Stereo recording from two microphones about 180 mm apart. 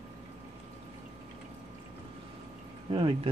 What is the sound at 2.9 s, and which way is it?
Speech, 30° right (ahead or behind).